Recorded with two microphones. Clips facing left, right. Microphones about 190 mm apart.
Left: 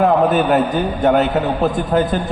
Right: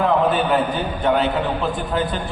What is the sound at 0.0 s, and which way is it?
Speech, 40° left (ahead or behind).